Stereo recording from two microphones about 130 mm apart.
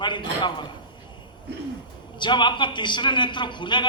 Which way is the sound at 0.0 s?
35° left (ahead or behind).